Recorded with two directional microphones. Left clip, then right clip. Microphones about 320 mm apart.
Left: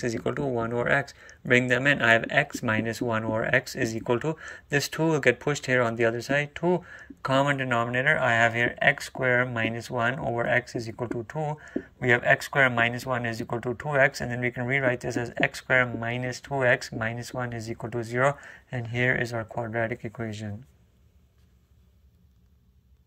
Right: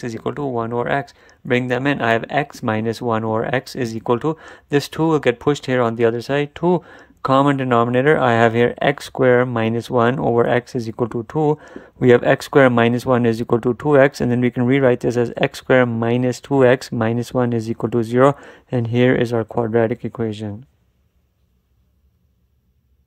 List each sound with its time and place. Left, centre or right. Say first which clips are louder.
0.0 s speech: right 4 dB; centre